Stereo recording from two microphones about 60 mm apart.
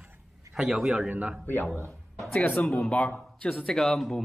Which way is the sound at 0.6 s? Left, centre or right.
Centre.